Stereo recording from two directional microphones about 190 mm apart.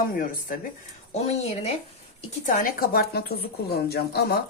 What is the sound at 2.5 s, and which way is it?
A woman's voice, 45° left (ahead or behind).